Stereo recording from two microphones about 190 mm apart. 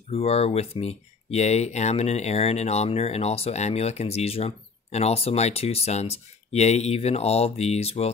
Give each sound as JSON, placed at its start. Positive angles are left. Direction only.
{"t": 0.1, "sound": "speech", "side_deg": 30}